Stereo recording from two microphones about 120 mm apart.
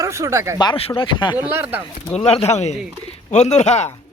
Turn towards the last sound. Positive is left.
turn(degrees=70)  # may be behind; listen again after turning